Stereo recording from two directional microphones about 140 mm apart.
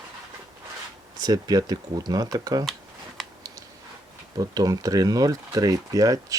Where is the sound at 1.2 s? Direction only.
25° right (ahead or behind).